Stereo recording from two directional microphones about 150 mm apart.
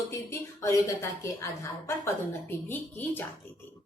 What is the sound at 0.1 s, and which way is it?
Speech, 20° left (ahead or behind).